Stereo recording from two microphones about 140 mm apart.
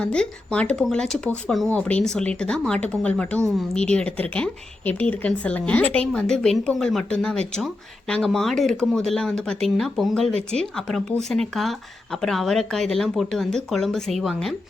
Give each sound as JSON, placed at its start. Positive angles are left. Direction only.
{"t": 0.0, "sound": "speech", "side_deg": 5}